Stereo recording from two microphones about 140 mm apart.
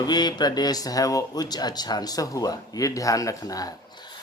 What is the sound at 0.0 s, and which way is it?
Speech, 30° left (ahead or behind).